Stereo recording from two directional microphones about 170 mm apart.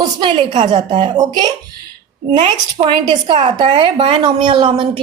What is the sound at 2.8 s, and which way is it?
A woman's voice, 25° right (ahead or behind).